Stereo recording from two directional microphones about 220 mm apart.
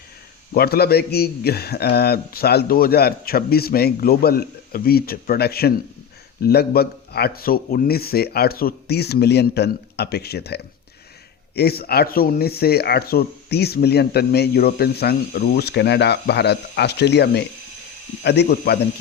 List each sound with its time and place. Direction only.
0.5 s speech: 45° left (ahead or behind)